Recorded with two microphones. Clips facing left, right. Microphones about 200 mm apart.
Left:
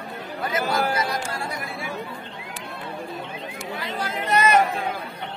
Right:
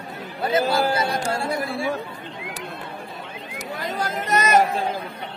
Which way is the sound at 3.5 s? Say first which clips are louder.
Right 4 dB; 45° right (ahead or behind).